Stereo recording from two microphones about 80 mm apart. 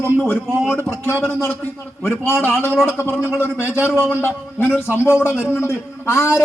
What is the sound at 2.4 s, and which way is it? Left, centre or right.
A man's voice, left.